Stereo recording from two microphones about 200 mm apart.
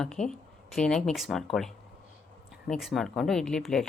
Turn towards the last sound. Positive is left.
turn(degrees=0)  # may be behind; listen again after turning